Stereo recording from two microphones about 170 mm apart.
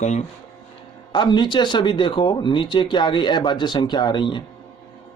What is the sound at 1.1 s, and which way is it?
Speech, 25° left (ahead or behind).